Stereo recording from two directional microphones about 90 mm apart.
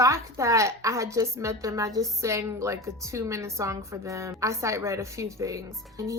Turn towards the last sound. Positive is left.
turn(degrees=-35)  # may be behind; listen again after turning